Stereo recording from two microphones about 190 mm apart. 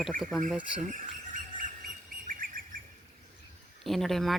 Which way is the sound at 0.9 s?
45° right (ahead or behind).